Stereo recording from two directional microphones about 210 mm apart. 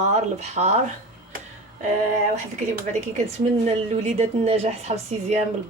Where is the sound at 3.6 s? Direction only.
30° right (ahead or behind).